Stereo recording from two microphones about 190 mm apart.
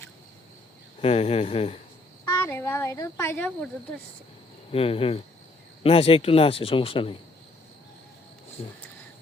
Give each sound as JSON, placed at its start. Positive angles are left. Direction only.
{"t": 1.0, "sound": "speech", "side_deg": 35}
{"t": 2.4, "sound": "a woman's voice", "side_deg": 10}
{"t": 4.7, "sound": "speech", "side_deg": 30}